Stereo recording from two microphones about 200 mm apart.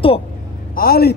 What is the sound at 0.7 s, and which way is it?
Speech, 50° left (ahead or behind).